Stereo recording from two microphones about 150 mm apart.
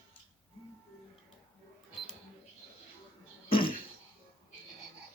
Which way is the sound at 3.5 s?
35° left (ahead or behind).